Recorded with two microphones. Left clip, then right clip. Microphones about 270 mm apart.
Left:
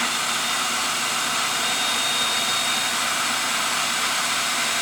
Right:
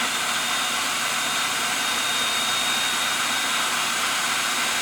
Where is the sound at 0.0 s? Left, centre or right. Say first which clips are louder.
Left 1 dB; centre.